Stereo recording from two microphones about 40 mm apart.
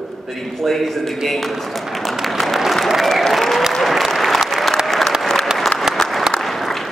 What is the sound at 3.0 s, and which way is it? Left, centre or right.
Applause, centre.